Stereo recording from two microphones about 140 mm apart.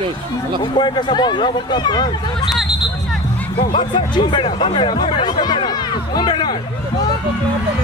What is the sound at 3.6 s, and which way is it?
Speech, 40° left (ahead or behind).